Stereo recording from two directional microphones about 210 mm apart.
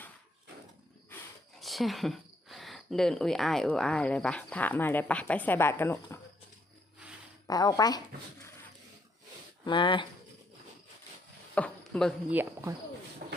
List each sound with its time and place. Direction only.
1.5 s speech: centre (ahead or behind)
7.4 s speech: 15° left (ahead or behind)
9.6 s speech: 25° left (ahead or behind)
11.5 s a sound: 5° left (ahead or behind)
12.3 s speech: 10° right (ahead or behind)
13.2 s a sound: 45° right (ahead or behind)